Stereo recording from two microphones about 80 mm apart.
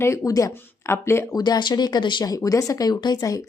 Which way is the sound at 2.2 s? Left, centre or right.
Left.